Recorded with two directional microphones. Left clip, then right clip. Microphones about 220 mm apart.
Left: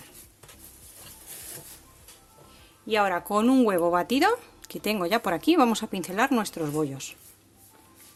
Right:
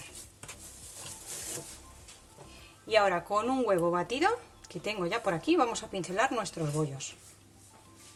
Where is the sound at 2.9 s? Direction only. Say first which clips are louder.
Left 2 dB; 40° left (ahead or behind).